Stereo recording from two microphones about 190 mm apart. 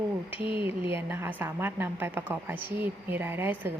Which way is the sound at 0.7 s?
10° right (ahead or behind).